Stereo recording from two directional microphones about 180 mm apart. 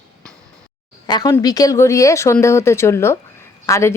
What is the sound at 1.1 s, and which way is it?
Speech, 20° left (ahead or behind).